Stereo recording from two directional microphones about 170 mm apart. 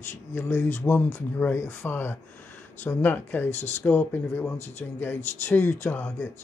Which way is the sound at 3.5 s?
40° left (ahead or behind).